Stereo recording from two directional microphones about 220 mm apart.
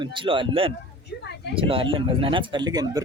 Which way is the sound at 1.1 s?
50° left (ahead or behind).